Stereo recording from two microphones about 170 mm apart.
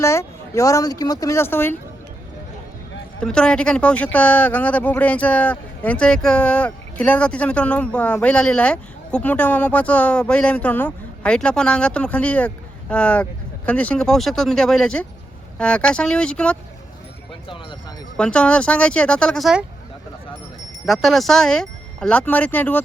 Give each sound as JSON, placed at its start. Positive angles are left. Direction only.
{"t": 0.0, "sound": "speech", "side_deg": 15}
{"t": 3.2, "sound": "speech", "side_deg": 5}
{"t": 17.5, "sound": "a sound", "side_deg": 30}
{"t": 18.2, "sound": "speech", "side_deg": 5}
{"t": 20.8, "sound": "speech", "side_deg": 0}